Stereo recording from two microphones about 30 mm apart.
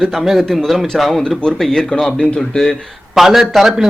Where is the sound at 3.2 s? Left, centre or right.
Centre.